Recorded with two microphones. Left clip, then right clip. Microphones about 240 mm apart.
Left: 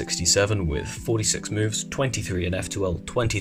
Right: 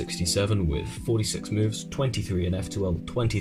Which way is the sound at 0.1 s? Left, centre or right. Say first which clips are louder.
Left 7 dB; left.